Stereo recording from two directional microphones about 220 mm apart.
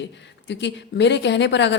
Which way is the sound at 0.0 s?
55° left (ahead or behind).